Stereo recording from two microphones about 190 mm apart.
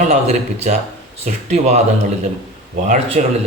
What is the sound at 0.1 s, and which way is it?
Speech, 35° right (ahead or behind).